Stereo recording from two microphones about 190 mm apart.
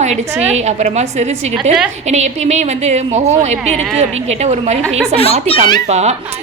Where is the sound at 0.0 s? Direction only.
35° right (ahead or behind).